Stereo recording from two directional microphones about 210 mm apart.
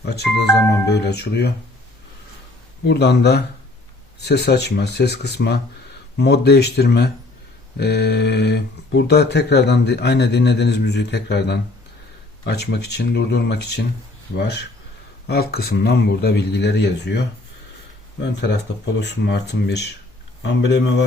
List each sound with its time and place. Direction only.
0.0 s speech: 50° left (ahead or behind)
2.8 s speech: 55° left (ahead or behind)
18.3 s speech: 55° left (ahead or behind)